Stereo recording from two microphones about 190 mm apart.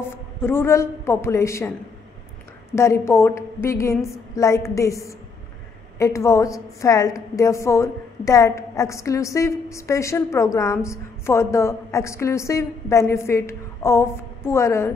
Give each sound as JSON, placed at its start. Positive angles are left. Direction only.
{"t": 0.4, "sound": "a woman's voice", "side_deg": 15}
{"t": 2.7, "sound": "a woman's voice", "side_deg": 15}